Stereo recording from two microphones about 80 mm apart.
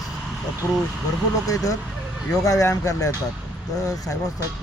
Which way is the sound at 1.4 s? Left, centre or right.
Left.